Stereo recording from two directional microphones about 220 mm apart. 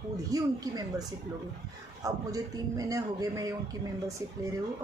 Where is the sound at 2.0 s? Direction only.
15° right (ahead or behind).